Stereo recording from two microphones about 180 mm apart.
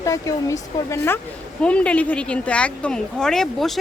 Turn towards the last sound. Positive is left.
turn(degrees=0)  # may be behind; listen again after turning